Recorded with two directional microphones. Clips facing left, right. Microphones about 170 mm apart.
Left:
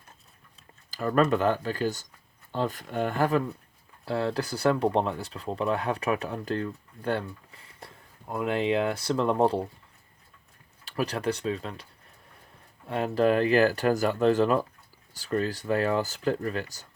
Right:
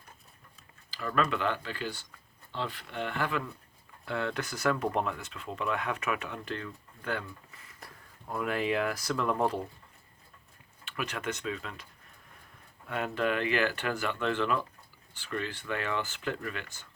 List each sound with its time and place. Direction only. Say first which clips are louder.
0.9 s speech: left 7 dB; 45° left (ahead or behind)
10.8 s speech: left 7 dB; 35° left (ahead or behind)
12.9 s speech: left 7 dB; 35° left (ahead or behind)